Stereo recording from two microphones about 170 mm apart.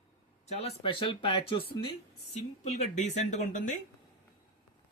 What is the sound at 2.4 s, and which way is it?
Speech, 40° left (ahead or behind).